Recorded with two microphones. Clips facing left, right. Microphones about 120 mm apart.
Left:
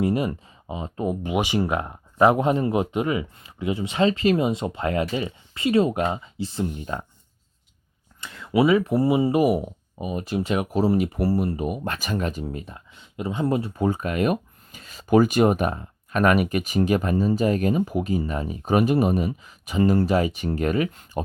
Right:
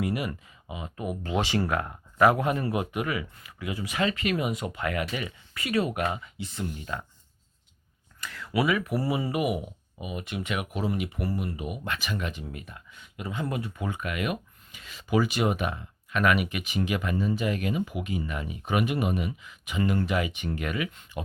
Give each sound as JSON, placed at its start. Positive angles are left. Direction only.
{"t": 0.0, "sound": "speech", "side_deg": 30}
{"t": 1.2, "sound": "speech", "side_deg": 15}
{"t": 8.2, "sound": "speech", "side_deg": 25}